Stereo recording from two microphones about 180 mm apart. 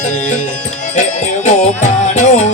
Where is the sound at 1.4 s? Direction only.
40° left (ahead or behind).